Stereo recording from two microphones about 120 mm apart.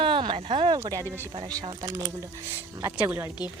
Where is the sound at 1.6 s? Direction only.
35° right (ahead or behind).